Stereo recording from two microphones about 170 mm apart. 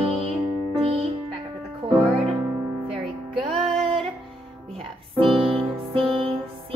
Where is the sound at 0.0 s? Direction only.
35° right (ahead or behind).